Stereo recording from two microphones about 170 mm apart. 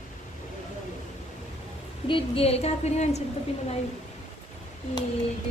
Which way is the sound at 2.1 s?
30° left (ahead or behind).